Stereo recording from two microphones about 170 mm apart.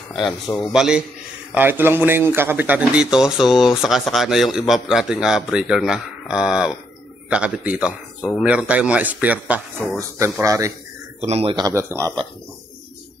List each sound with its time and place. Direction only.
0.1 s a man's voice: 5° left (ahead or behind); by 10.7 s 20° right (ahead or behind)
11.1 s speech: 40° right (ahead or behind)
11.6 s speech: 15° right (ahead or behind)